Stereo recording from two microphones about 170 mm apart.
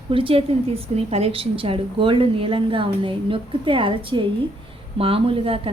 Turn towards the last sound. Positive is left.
turn(degrees=-35)  # may be behind; listen again after turning